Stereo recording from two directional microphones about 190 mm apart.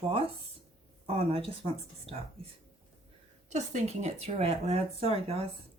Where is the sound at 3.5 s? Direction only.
35° right (ahead or behind).